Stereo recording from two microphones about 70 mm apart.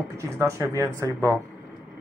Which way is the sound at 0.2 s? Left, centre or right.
Right.